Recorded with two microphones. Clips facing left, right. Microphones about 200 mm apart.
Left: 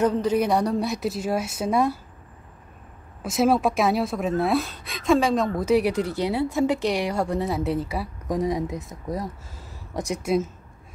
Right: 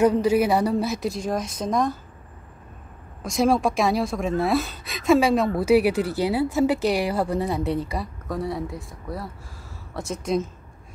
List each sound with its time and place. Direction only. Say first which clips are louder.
0.0 s speech: right 3 dB; 10° right (ahead or behind); by 2.0 s 10° left (ahead or behind)
3.2 s speech: even; 5° left (ahead or behind)
8.3 s speech: left 4 dB; 15° left (ahead or behind)